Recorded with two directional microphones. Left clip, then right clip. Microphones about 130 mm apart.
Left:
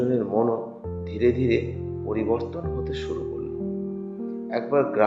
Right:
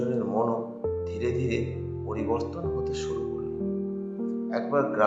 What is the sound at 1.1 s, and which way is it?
A man's voice, 20° left (ahead or behind).